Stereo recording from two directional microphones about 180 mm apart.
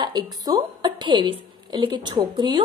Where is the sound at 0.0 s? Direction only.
25° right (ahead or behind).